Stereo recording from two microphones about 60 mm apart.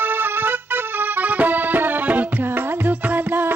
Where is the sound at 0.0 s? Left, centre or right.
Right.